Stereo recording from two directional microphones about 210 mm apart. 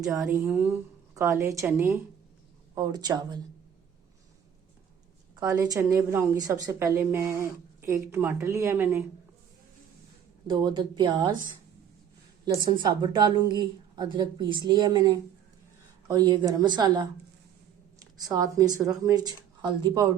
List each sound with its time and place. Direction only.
0.1 s a woman's voice: 15° right (ahead or behind)
5.4 s a woman's voice: 15° right (ahead or behind)
10.4 s a woman's voice: 20° right (ahead or behind)
12.5 s a woman's voice: 20° right (ahead or behind)
18.3 s a woman's voice: 15° right (ahead or behind)